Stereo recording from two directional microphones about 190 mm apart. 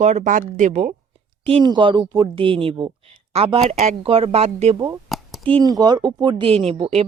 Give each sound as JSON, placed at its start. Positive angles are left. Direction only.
{"t": 0.0, "sound": "a woman's voice", "side_deg": -40}
{"t": 1.5, "sound": "a woman's voice", "side_deg": -25}
{"t": 5.0, "sound": "a sound", "side_deg": 0}
{"t": 5.5, "sound": "a woman's voice", "side_deg": -20}